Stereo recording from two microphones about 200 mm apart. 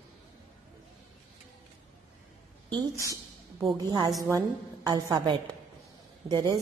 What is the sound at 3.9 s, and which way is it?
A woman's voice, 20° right (ahead or behind).